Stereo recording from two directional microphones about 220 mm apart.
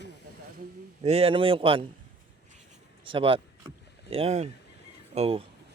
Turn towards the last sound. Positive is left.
turn(degrees=-25)  # may be behind; listen again after turning